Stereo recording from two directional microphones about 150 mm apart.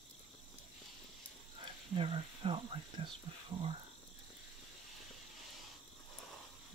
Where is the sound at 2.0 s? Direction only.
40° right (ahead or behind).